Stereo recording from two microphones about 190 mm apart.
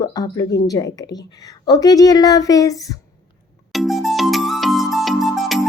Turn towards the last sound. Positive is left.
turn(degrees=0)  # may be behind; listen again after turning